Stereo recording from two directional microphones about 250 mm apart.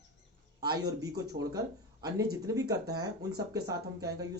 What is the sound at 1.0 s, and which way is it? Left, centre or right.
Speech, centre.